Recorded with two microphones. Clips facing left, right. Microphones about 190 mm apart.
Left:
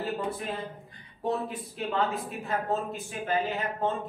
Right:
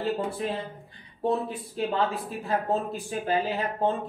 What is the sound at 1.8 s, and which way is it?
Speech, 35° right (ahead or behind).